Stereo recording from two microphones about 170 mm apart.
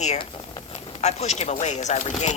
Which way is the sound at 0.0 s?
45° left (ahead or behind).